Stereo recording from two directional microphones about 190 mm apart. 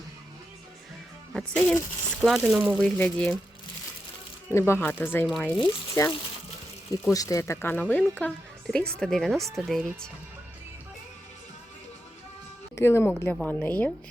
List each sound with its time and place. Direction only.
1.3 s speech: 5° left (ahead or behind)
4.5 s speech: 15° left (ahead or behind)
5.5 s speech: 20° left (ahead or behind); by 10.1 s centre (ahead or behind)
12.7 s speech: 15° left (ahead or behind)